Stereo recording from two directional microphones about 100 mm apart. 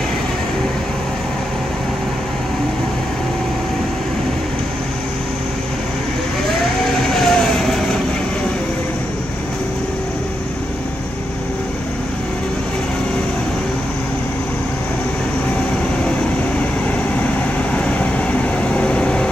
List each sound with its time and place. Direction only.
6.9 s vehicle: 5° left (ahead or behind)
17.7 s train: 15° left (ahead or behind)